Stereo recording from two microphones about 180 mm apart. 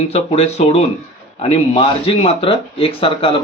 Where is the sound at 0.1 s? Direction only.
35° left (ahead or behind).